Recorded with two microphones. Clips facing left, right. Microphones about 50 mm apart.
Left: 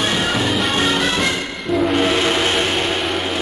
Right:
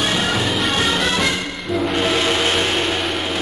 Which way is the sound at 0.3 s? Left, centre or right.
Centre.